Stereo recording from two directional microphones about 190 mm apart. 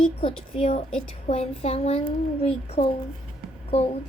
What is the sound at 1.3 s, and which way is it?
Child singing, 30° left (ahead or behind).